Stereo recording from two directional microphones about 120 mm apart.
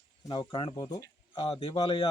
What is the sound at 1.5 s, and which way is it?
Speech, 50° left (ahead or behind).